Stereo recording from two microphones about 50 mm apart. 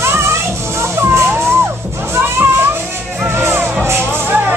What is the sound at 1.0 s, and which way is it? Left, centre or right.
Music, right.